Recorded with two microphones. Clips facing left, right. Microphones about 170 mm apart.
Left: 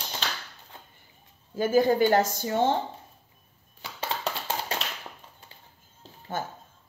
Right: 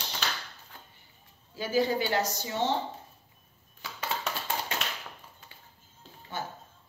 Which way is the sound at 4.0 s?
35° left (ahead or behind).